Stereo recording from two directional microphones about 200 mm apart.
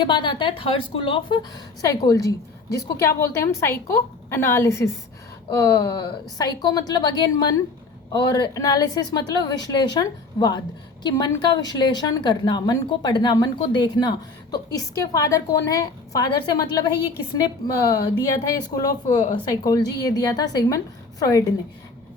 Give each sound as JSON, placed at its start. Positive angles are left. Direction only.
{"t": 0.0, "sound": "a woman's voice", "side_deg": 25}